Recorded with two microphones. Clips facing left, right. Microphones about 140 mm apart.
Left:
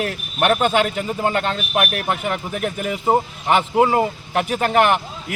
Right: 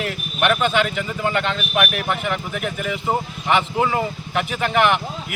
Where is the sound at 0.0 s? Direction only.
35° left (ahead or behind).